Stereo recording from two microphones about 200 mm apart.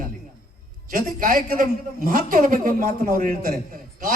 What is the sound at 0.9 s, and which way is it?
A man's voice, 45° right (ahead or behind).